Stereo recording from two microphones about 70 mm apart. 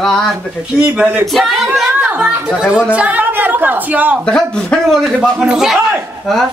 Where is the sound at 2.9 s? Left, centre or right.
Right.